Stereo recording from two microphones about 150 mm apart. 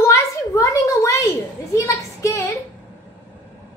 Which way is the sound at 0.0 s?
20° left (ahead or behind).